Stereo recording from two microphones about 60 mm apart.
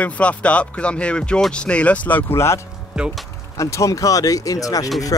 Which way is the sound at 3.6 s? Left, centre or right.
Left.